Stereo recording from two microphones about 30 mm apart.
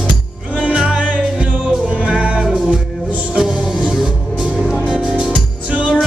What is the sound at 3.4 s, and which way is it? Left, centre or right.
Music, right.